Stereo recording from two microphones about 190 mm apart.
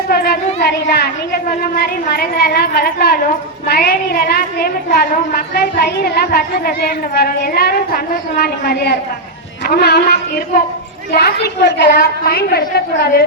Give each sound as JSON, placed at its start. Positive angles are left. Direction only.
{"t": 0.1, "sound": "a woman's voice", "side_deg": 55}